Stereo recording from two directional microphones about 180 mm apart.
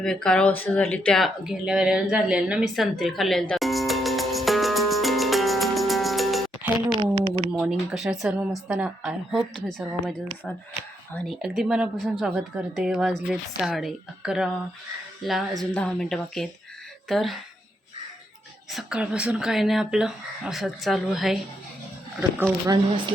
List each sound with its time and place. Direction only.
0.0 s a woman's voice: 5° left (ahead or behind)
3.0 s music: centre (ahead or behind)
7.0 s a sound: 35° right (ahead or behind)
7.5 s a woman's voice: 5° right (ahead or behind)
11.4 s a woman's voice: 5° right (ahead or behind)
18.7 s a woman's voice: 5° right (ahead or behind)